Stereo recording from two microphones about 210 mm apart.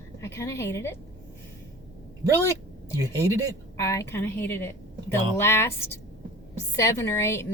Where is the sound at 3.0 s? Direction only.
15° right (ahead or behind).